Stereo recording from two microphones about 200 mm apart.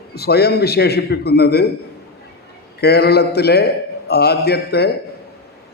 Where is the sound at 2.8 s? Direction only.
55° left (ahead or behind).